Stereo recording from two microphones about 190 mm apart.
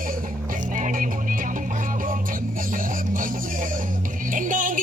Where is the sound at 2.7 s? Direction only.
45° right (ahead or behind).